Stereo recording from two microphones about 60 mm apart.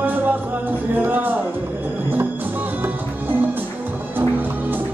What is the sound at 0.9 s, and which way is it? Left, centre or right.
Music, right.